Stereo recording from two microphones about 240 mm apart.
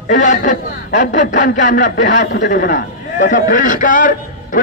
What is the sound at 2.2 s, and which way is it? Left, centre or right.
Speech, left.